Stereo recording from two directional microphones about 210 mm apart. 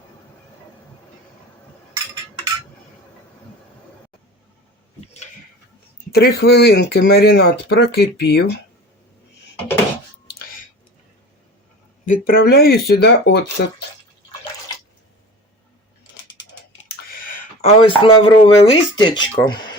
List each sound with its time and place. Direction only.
6.1 s speech: 50° left (ahead or behind)
10.2 s a sound: 40° left (ahead or behind)
12.0 s speech: 40° left (ahead or behind)
17.1 s speech: 40° left (ahead or behind); by 19.7 s 20° left (ahead or behind)